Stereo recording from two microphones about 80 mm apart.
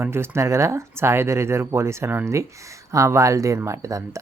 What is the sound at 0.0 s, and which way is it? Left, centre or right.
Speech, right.